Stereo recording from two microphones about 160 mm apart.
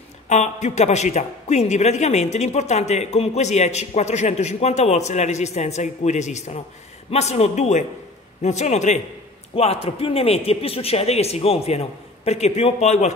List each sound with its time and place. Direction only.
0.3 s a man's voice: 45° left (ahead or behind)